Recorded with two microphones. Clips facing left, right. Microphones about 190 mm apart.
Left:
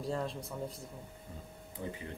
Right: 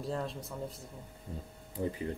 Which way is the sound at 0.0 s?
Centre (ahead or behind).